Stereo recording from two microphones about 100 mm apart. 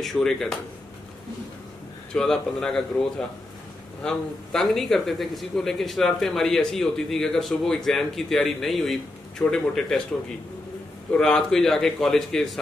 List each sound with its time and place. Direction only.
0.0 s speech: 5° left (ahead or behind)
2.1 s speech: 5° left (ahead or behind)
11.1 s speech: 5° left (ahead or behind)